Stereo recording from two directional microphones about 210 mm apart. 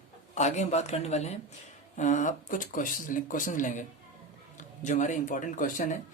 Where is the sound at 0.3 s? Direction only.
35° left (ahead or behind).